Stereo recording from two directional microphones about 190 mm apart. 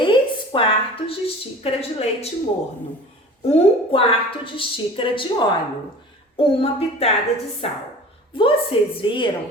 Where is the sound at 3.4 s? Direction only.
30° left (ahead or behind).